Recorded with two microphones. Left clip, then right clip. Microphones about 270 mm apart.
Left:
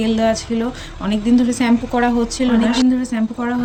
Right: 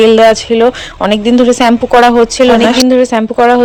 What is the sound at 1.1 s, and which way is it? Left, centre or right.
Speech, centre.